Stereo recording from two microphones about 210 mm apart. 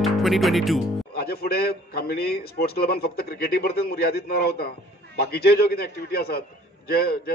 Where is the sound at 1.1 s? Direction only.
45° left (ahead or behind).